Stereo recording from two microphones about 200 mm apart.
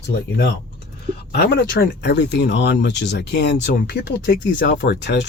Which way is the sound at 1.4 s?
55° left (ahead or behind).